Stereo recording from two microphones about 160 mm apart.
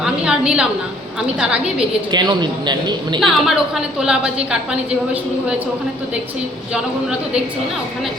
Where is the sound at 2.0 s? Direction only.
25° right (ahead or behind).